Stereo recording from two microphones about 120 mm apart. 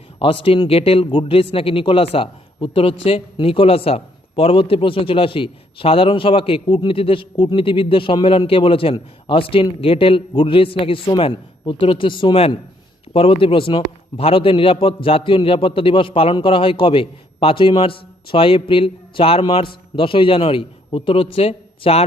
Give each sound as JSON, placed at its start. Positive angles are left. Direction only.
{"t": 0.2, "sound": "a man's voice", "side_deg": 50}